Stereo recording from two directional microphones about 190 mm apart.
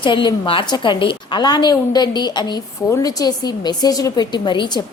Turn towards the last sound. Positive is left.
turn(degrees=25)  # may be behind; listen again after turning